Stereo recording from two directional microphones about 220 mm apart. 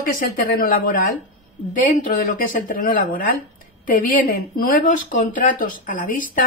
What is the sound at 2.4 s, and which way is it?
Speech, 40° left (ahead or behind).